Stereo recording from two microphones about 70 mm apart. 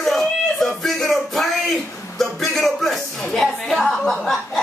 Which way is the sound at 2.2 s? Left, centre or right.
Centre.